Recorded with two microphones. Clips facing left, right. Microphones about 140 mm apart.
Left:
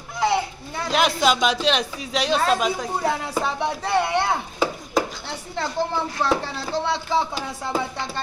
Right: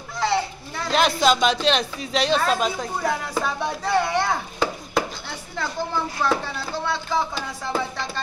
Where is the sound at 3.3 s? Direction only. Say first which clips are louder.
Left 1 dB; 25° left (ahead or behind).